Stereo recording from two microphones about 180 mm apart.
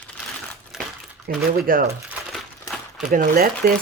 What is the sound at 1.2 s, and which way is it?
Speech, 50° right (ahead or behind).